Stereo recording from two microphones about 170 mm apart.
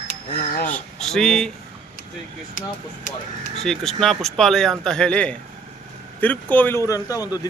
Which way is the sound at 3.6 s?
Centre (ahead or behind).